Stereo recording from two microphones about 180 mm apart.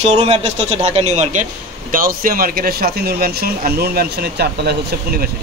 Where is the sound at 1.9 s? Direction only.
50° right (ahead or behind).